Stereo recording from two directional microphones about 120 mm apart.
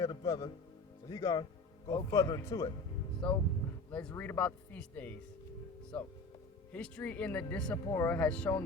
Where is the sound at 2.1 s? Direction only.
25° left (ahead or behind).